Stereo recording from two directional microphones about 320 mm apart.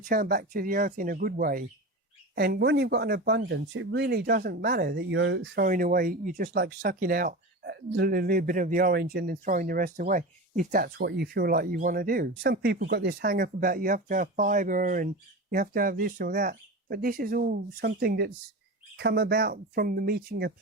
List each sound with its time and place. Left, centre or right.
0.0 s speech: right